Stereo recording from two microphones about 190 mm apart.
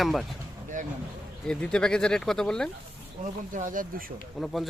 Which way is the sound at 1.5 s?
5° left (ahead or behind).